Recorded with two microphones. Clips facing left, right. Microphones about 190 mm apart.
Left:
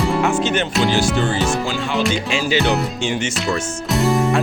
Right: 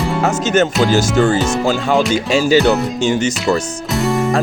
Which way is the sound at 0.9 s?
45° right (ahead or behind).